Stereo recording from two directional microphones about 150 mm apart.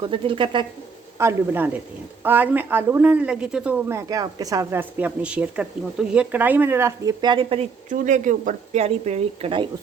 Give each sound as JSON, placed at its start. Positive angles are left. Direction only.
{"t": 0.0, "sound": "speech", "side_deg": -35}
{"t": 1.2, "sound": "speech", "side_deg": -15}
{"t": 7.9, "sound": "speech", "side_deg": -55}